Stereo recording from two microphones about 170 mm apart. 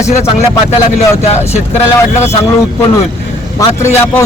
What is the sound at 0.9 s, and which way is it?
Speech, 40° left (ahead or behind).